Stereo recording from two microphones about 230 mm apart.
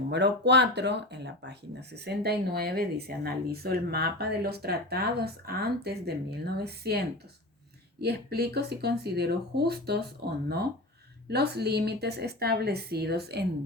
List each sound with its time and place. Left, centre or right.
0.1 s speech: right
8.0 s speech: right
11.3 s speech: right